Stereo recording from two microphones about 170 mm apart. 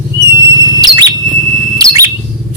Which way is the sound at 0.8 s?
25° right (ahead or behind).